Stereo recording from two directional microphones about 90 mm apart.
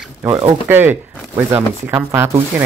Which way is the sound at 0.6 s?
25° right (ahead or behind).